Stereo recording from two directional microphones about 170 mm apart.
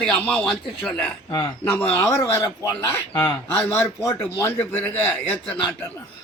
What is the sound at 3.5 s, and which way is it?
Speech, 10° left (ahead or behind).